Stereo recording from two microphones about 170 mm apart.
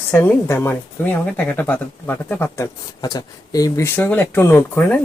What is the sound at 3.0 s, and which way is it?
Speech, 20° left (ahead or behind).